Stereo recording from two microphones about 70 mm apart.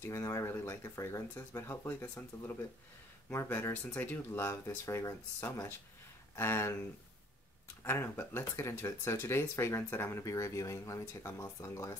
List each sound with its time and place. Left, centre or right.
0.0 s speech: left
3.7 s speech: left
4.3 s speech: left